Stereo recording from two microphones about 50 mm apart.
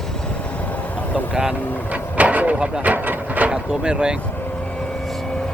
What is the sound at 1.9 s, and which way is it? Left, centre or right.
Vehicle, right.